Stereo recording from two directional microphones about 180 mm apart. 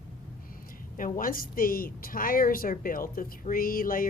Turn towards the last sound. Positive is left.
turn(degrees=50)  # may be behind; listen again after turning